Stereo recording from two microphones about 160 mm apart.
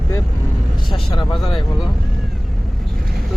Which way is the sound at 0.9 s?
30° left (ahead or behind).